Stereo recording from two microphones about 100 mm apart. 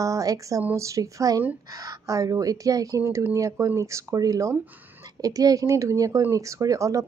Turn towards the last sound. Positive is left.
turn(degrees=-35)  # may be behind; listen again after turning